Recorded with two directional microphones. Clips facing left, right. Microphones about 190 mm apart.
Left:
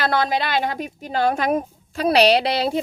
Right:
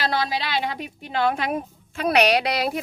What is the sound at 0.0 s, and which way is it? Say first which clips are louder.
Speech: left 4 dB; 50° left (ahead or behind).